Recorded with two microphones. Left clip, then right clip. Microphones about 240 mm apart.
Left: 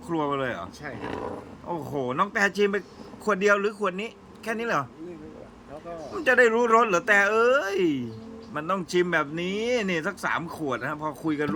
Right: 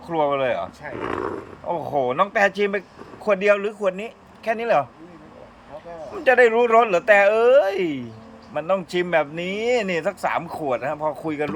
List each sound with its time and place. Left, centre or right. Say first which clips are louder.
0.1 s speech: right 7 dB; centre
6.2 s speech: right 4 dB; centre